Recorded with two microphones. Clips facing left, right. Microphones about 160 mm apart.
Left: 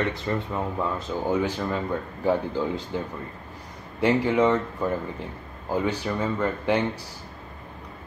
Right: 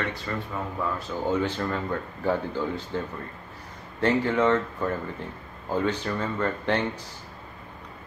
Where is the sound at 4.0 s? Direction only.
10° left (ahead or behind).